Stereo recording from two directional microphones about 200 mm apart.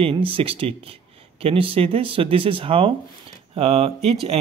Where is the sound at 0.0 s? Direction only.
25° right (ahead or behind).